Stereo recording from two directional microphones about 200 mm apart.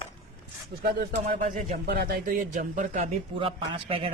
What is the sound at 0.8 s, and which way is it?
Speech, 60° right (ahead or behind).